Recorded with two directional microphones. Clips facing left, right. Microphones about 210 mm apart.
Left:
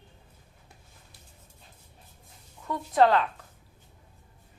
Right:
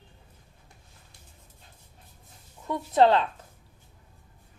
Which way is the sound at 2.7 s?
25° right (ahead or behind).